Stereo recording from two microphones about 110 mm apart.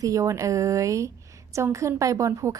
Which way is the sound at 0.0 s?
30° right (ahead or behind).